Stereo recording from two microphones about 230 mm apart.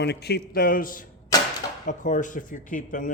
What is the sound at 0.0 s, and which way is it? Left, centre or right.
Speech, left.